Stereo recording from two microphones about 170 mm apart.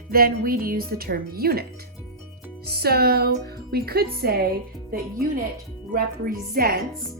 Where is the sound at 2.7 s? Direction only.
65° right (ahead or behind).